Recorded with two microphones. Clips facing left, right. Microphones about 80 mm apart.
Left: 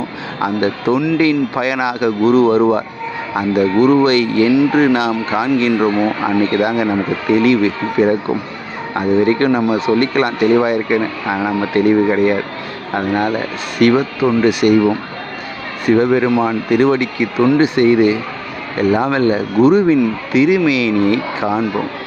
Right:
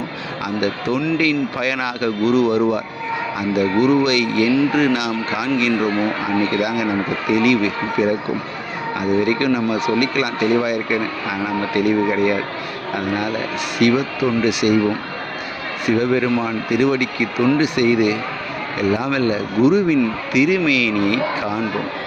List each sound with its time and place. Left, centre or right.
0.4 s speech: left
2.2 s speech: left
15.9 s speech: left
16.4 s speech: left